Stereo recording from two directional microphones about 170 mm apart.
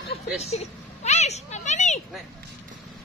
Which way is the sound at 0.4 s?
40° left (ahead or behind).